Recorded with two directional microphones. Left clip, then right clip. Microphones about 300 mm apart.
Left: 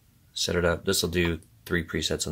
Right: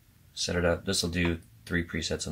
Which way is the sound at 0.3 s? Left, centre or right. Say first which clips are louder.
Left 2 dB; left.